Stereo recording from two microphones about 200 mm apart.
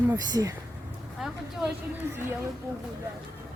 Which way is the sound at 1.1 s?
Centre (ahead or behind).